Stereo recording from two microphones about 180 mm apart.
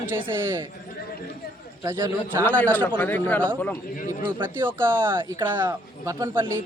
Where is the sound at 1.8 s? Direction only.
15° right (ahead or behind).